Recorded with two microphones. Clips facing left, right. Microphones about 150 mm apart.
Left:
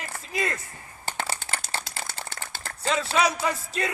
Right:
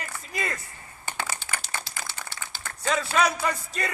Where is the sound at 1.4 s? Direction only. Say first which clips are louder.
Left 1 dB; 30° left (ahead or behind).